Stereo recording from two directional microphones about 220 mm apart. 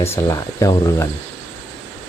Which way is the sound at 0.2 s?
15° left (ahead or behind).